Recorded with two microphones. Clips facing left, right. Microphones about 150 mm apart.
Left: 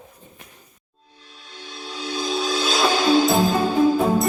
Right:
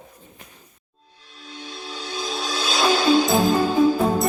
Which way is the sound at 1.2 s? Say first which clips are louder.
Right 3 dB; centre (ahead or behind).